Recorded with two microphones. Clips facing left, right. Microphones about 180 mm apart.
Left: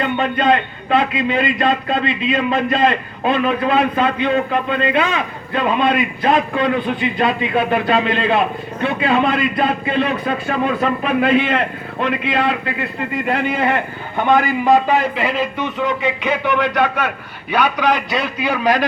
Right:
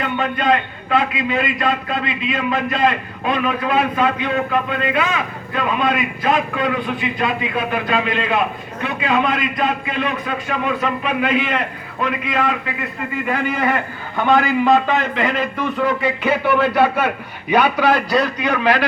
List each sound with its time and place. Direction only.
0.0 s a man's voice: 25° left (ahead or behind); by 18.3 s centre (ahead or behind)
18.4 s a man's voice: 10° left (ahead or behind)